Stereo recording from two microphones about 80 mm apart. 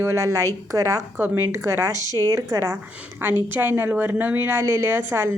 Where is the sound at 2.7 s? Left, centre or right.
Right.